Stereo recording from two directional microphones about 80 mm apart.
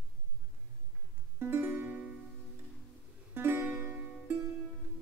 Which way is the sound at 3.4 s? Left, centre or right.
Right.